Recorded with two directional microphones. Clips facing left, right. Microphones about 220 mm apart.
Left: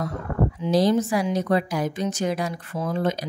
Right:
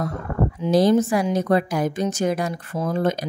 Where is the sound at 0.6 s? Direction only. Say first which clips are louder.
Right 4 dB; 50° right (ahead or behind).